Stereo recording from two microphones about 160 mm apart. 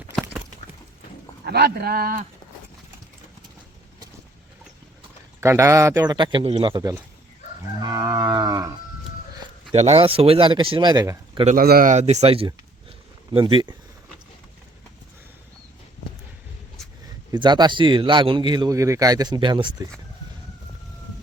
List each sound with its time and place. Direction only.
1.5 s speech: 85° right; by 2.2 s 65° right (ahead or behind)
5.4 s a man's voice: 20° right (ahead or behind)
7.8 s livestock: 20° right (ahead or behind)
9.7 s speech: 40° right (ahead or behind); by 11.2 s 20° right (ahead or behind)
11.4 s a man's voice: 70° right (ahead or behind)
11.9 s speech: 45° right (ahead or behind)
17.3 s a man's voice: 25° right (ahead or behind)